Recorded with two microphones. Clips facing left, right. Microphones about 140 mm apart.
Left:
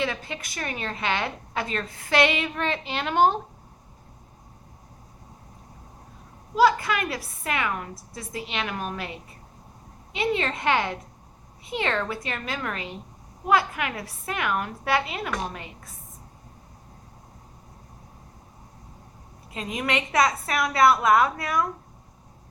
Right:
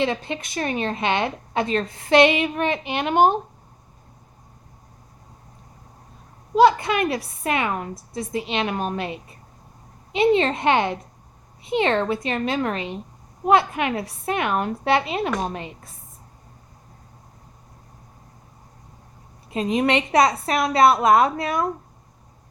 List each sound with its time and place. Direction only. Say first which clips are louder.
0.0 s a woman's voice: right 5 dB; 25° right (ahead or behind)
6.6 s a woman's voice: right 4 dB; 25° right (ahead or behind)
19.5 s a woman's voice: right 8 dB; 25° right (ahead or behind)